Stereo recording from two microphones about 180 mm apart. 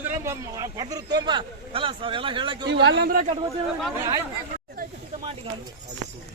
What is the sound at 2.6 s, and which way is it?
Speech, 75° right (ahead or behind).